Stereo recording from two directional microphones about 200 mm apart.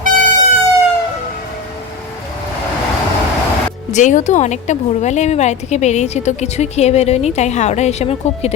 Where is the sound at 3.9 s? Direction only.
40° left (ahead or behind).